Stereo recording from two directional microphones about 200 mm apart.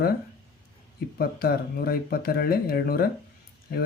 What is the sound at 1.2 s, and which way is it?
Speech, 50° left (ahead or behind).